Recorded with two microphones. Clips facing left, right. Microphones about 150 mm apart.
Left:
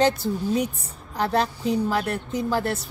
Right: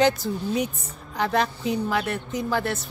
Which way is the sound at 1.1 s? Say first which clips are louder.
Even; 35° left (ahead or behind).